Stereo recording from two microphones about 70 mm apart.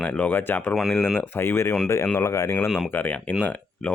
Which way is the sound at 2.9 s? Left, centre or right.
Left.